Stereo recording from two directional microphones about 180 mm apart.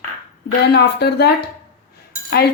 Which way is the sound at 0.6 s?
65° left (ahead or behind).